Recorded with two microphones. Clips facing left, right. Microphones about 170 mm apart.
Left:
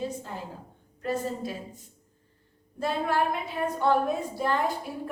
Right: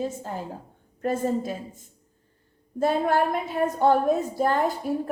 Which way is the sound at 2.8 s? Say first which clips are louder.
Right 5 dB; 45° right (ahead or behind).